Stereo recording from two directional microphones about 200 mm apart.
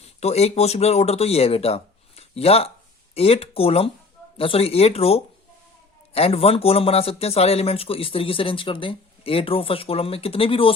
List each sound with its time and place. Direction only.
0.0 s speech: 30° left (ahead or behind)